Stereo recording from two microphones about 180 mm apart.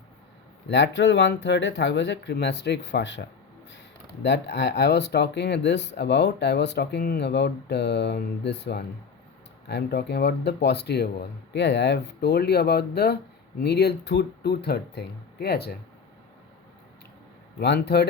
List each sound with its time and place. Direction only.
0.7 s speech: 80° left; by 15.8 s 60° left (ahead or behind)
17.6 s speech: 65° left (ahead or behind)